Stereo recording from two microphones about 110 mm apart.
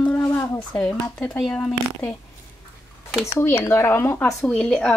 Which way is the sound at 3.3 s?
20° left (ahead or behind).